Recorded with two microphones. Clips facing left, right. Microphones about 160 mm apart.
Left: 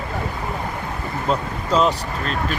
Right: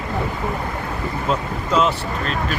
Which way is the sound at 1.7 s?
35° left (ahead or behind).